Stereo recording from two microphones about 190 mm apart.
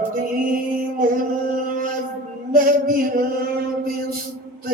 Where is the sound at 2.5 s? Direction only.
50° right (ahead or behind).